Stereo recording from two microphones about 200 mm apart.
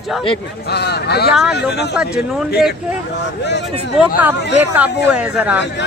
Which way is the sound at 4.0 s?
Centre (ahead or behind).